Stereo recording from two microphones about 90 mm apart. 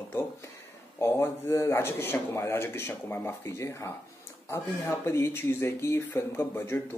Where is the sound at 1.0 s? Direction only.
30° left (ahead or behind).